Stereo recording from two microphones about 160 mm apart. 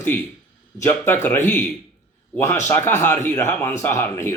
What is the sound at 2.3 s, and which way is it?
Speech, 15° left (ahead or behind).